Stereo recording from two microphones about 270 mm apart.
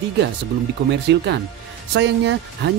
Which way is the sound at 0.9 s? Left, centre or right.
Right.